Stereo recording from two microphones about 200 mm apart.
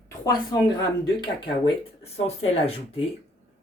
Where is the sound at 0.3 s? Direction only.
20° left (ahead or behind).